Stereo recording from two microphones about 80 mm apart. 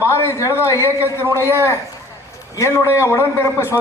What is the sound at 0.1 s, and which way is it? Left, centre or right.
A man's voice, left.